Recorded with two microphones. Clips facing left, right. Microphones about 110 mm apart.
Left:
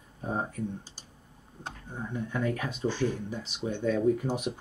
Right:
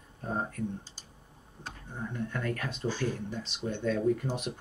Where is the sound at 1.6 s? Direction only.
15° left (ahead or behind).